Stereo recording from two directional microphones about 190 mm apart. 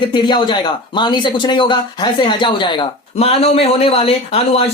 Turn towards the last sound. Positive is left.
turn(degrees=30)  # may be behind; listen again after turning